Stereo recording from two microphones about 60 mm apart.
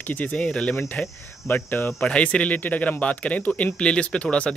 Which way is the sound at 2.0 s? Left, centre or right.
Left.